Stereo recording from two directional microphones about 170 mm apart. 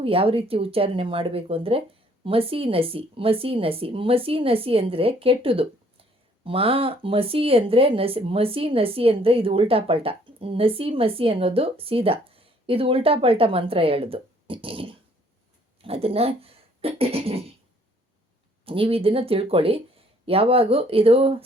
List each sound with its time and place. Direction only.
0.0 s speech: 35° right (ahead or behind)
18.6 s speech: 35° right (ahead or behind)